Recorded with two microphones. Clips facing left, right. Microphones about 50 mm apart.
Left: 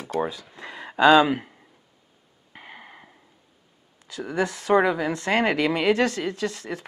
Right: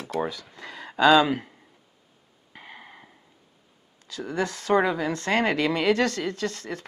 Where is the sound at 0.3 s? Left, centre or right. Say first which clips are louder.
Left 1 dB; left.